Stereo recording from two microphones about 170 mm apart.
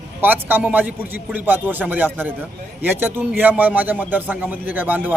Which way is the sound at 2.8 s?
10° right (ahead or behind).